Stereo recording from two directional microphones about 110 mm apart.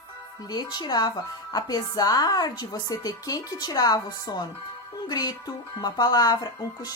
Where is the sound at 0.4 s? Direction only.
40° left (ahead or behind).